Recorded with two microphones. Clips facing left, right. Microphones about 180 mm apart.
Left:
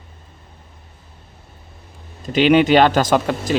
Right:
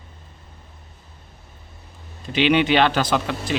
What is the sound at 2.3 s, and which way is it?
Speech, 45° left (ahead or behind).